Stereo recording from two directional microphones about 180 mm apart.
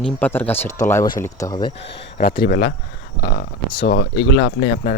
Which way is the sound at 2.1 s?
50° left (ahead or behind).